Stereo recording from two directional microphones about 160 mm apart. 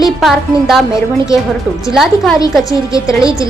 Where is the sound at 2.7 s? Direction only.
20° left (ahead or behind).